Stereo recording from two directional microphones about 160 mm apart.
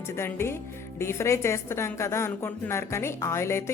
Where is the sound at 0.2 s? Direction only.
15° left (ahead or behind).